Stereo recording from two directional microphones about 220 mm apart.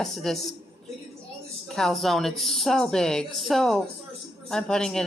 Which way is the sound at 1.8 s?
Centre (ahead or behind).